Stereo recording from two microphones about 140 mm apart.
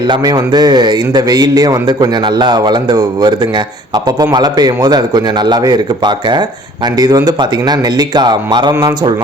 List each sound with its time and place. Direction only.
0.1 s a man's voice: 30° right (ahead or behind)